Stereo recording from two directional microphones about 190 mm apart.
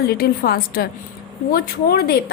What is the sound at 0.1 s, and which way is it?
A woman's voice, 55° left (ahead or behind).